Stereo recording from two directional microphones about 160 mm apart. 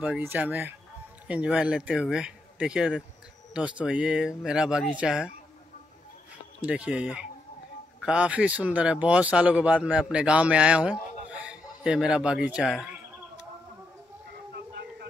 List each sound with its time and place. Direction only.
0.0 s a man's voice: 10° right (ahead or behind)
6.6 s a man's voice: 10° right (ahead or behind)
14.5 s a sound: 90° right